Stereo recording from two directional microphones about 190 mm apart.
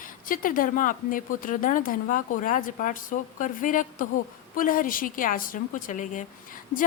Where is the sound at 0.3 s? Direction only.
45° left (ahead or behind).